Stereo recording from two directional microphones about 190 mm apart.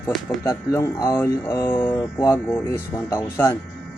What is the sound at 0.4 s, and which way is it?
Speech, 20° left (ahead or behind).